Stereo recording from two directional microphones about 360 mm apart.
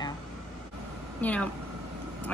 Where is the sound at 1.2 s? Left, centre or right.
Centre.